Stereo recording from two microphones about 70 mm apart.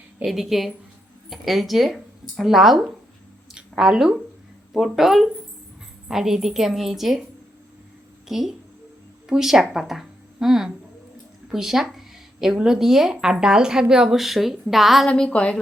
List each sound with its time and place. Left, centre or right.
0.3 s a woman's voice: centre
3.5 s a sound: centre
4.7 s a woman's voice: centre
8.3 s a woman's voice: centre
15.0 s a woman's voice: centre